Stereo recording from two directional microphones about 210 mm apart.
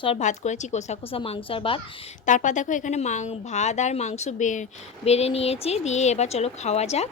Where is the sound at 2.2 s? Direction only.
35° left (ahead or behind).